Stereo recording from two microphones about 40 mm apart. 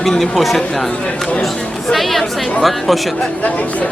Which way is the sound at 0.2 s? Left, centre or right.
Centre.